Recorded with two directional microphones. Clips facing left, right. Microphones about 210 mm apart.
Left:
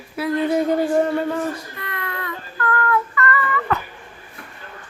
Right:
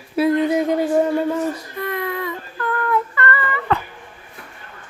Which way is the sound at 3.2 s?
30° right (ahead or behind).